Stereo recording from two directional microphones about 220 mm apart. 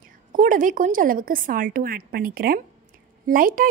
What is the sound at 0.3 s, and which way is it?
A woman's voice, 35° right (ahead or behind).